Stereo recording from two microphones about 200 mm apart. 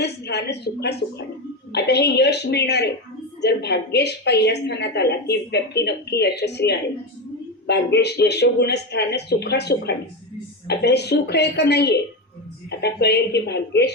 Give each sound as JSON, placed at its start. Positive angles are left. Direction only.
{"t": 0.0, "sound": "a woman's voice", "side_deg": 55}